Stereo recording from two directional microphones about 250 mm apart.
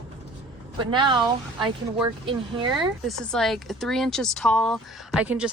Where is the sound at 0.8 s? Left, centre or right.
Centre.